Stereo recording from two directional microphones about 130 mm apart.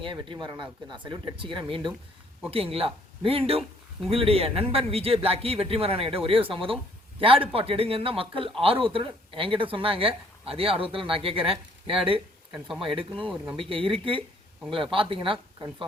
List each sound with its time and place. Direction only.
0.0 s speech: 40° right (ahead or behind)
12.5 s speech: 5° right (ahead or behind)
13.6 s speech: 40° right (ahead or behind)